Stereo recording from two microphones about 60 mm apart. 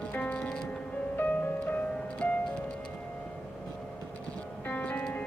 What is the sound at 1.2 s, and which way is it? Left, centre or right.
Music, left.